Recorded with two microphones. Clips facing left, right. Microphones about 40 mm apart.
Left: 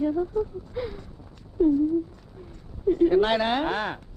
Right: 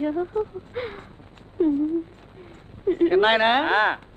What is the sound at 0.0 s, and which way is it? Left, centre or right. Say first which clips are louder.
A woman's voice: even; right.